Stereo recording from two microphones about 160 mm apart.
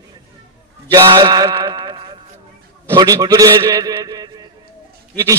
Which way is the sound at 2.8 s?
20° right (ahead or behind).